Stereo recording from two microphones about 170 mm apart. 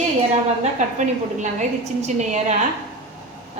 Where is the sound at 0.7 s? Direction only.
45° right (ahead or behind).